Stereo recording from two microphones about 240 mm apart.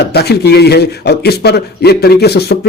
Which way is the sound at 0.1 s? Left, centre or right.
Left.